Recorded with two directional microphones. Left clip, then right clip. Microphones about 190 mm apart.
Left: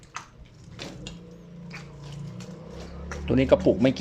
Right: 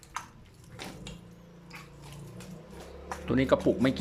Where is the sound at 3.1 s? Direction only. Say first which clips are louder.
Left 5 dB; centre (ahead or behind).